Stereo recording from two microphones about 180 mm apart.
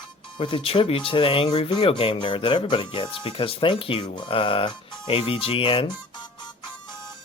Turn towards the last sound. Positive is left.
turn(degrees=30)  # may be behind; listen again after turning